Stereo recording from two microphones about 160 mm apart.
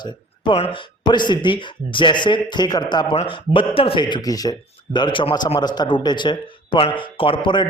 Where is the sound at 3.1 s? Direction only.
35° left (ahead or behind).